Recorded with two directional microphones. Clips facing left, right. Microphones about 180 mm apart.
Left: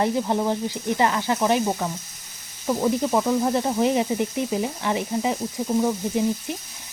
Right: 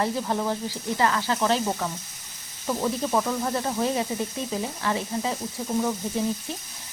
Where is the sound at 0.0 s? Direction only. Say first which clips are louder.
Left 4 dB; 20° left (ahead or behind).